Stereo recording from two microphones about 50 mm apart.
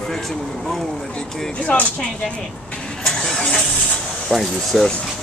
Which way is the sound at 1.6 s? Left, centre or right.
Left.